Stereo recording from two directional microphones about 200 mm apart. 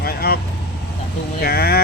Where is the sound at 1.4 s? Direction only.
50° left (ahead or behind).